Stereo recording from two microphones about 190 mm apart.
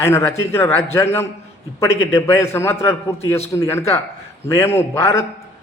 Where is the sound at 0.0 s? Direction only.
15° left (ahead or behind).